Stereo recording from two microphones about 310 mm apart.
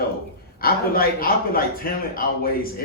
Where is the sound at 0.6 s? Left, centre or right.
Left.